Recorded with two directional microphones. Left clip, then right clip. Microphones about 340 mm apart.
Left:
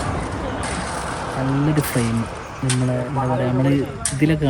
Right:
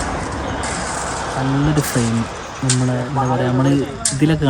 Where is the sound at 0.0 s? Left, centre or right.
Right.